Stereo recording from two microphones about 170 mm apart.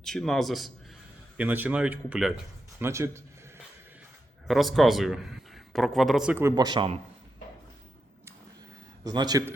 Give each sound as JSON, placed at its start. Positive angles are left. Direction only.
{"t": 0.0, "sound": "a man's voice", "side_deg": 0}
{"t": 1.4, "sound": "speech", "side_deg": -10}
{"t": 4.4, "sound": "a man's voice", "side_deg": 0}
{"t": 6.4, "sound": "speech", "side_deg": -25}
{"t": 9.0, "sound": "speech", "side_deg": -25}